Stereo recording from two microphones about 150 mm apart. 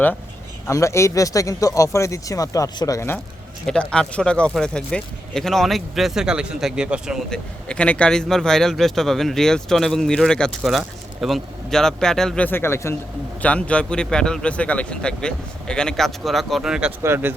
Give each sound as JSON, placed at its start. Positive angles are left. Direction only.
{"t": 0.7, "sound": "speech", "side_deg": 20}
{"t": 3.7, "sound": "speech", "side_deg": 5}
{"t": 7.3, "sound": "speech", "side_deg": 5}
{"t": 17.0, "sound": "speech", "side_deg": -15}